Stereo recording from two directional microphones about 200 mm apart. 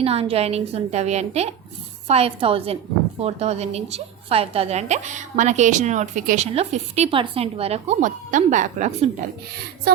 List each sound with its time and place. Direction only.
0.0 s a woman's voice: 30° right (ahead or behind)